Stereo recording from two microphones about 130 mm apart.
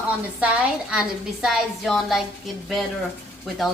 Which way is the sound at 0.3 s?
10° right (ahead or behind).